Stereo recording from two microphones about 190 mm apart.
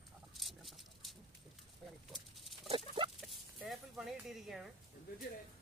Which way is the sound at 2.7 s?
30° right (ahead or behind).